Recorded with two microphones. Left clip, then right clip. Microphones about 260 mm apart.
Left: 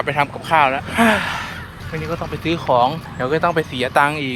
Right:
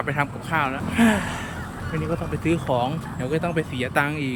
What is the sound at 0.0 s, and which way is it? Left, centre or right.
Speech, centre.